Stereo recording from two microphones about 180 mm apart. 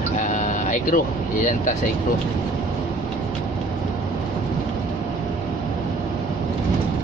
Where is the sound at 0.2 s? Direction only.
45° left (ahead or behind).